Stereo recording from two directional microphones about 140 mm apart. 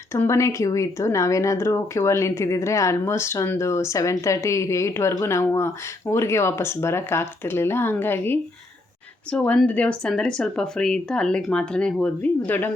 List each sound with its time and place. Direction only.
0.1 s speech: 20° left (ahead or behind)